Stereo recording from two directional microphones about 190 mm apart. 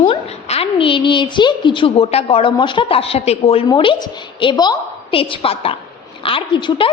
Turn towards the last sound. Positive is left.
turn(degrees=25)  # may be behind; listen again after turning